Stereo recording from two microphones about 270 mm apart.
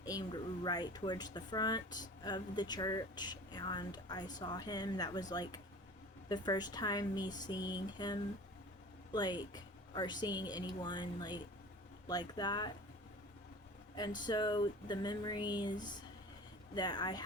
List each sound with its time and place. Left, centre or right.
0.0 s speech: centre
14.2 s speech: centre